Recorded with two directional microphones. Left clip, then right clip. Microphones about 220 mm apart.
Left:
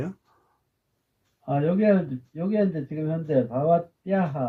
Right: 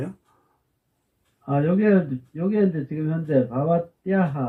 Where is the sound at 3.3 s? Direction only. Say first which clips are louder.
Even; 35° left (ahead or behind).